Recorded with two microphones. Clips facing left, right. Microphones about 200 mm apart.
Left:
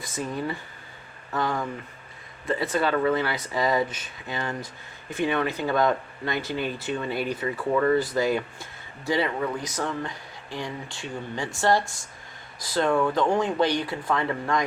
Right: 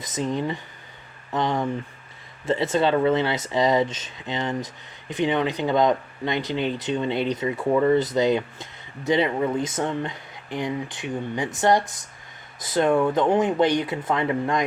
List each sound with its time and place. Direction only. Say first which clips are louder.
0.0 s speech: right 4 dB; 20° right (ahead or behind)
2.7 s speech: right 3 dB; 25° right (ahead or behind)